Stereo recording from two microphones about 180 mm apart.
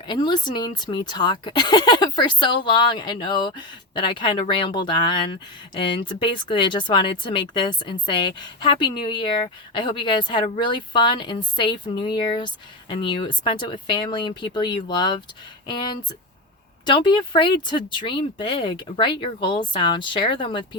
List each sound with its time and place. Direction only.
0.1 s speech: 25° left (ahead or behind)